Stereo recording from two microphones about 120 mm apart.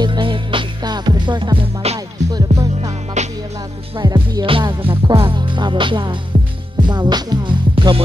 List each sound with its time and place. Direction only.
0.0 s music: 40° right (ahead or behind)
2.3 s music: 35° right (ahead or behind)
3.2 s music: 75° right (ahead or behind)
4.0 s music: 35° right (ahead or behind)